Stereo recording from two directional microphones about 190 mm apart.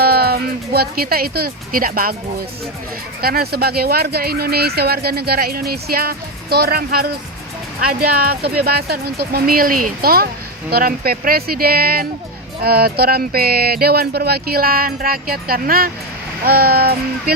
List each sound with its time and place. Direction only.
0.0 s speech: 55° right (ahead or behind)
3.2 s speech: 50° right (ahead or behind)